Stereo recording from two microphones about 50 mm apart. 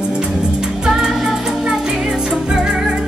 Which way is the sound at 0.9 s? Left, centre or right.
Centre.